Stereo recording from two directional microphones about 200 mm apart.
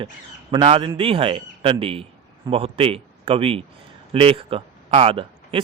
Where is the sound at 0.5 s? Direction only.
25° right (ahead or behind).